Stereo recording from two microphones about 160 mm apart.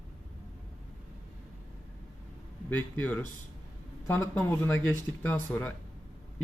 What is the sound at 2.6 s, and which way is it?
Speech, 10° left (ahead or behind).